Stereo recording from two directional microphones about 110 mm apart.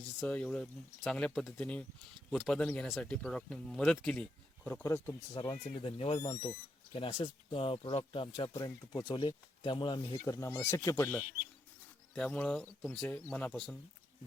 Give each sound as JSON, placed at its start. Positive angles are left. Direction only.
{"t": 0.0, "sound": "speech", "side_deg": 10}
{"t": 4.8, "sound": "speech", "side_deg": 25}
{"t": 5.3, "sound": "speech", "side_deg": 40}
{"t": 5.6, "sound": "speech", "side_deg": 65}
{"t": 6.1, "sound": "speech", "side_deg": 25}
{"t": 6.9, "sound": "speech", "side_deg": 55}
{"t": 8.4, "sound": "speech", "side_deg": 35}
{"t": 10.2, "sound": "speech", "side_deg": 30}
{"t": 12.1, "sound": "speech", "side_deg": 10}